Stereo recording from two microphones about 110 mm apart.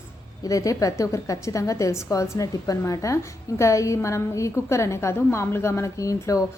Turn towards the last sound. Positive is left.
turn(degrees=30)  # may be behind; listen again after turning